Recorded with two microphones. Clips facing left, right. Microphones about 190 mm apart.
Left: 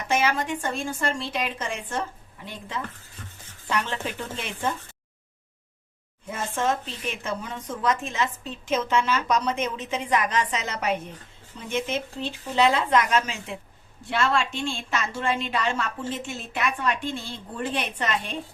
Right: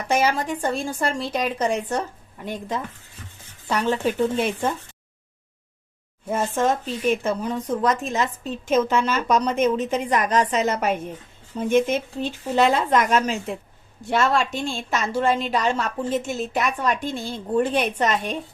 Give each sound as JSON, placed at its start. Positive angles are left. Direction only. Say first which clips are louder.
{"t": 0.1, "sound": "a woman's voice", "louder": "right 3 dB", "side_deg": -35}
{"t": 6.2, "sound": "a woman's voice", "louder": "right 5 dB", "side_deg": -40}